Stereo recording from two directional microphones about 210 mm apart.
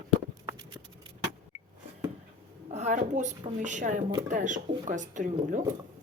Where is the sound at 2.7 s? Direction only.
35° right (ahead or behind).